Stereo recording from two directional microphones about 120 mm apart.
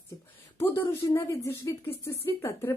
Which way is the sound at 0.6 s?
20° left (ahead or behind).